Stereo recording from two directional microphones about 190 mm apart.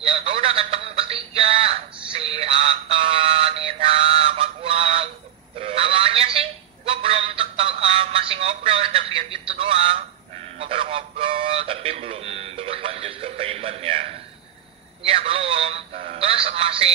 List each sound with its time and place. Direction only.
0.0 s music: 30° right (ahead or behind)
5.6 s telephone: 30° right (ahead or behind)
9.5 s a sound: 30° right (ahead or behind)
16.0 s music: 30° right (ahead or behind)